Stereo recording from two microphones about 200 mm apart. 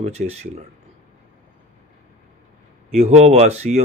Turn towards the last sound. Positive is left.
turn(degrees=-35)  # may be behind; listen again after turning